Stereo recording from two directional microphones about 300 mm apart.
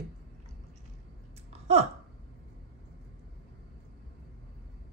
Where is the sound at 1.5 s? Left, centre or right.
Right.